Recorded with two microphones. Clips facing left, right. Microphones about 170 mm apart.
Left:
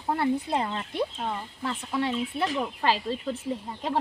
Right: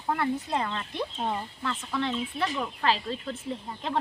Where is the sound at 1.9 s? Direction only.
10° left (ahead or behind).